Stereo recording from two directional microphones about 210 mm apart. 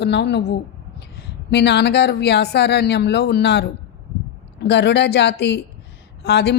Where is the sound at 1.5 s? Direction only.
55° left (ahead or behind).